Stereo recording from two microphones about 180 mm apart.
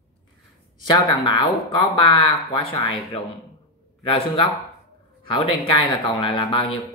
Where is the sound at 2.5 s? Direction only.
30° left (ahead or behind).